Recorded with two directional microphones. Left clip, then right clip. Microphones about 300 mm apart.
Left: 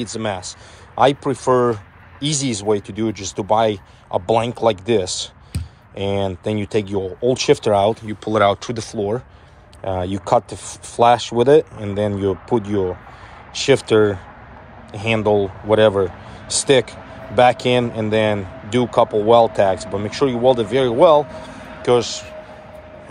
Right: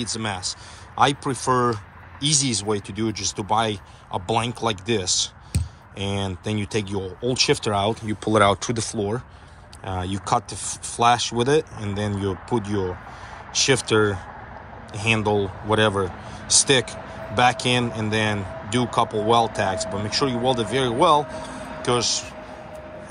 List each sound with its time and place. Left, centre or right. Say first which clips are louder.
0.0 s speech: left 3 dB; centre
21.2 s a sound: left 4 dB; right
21.8 s speech: left 6 dB; centre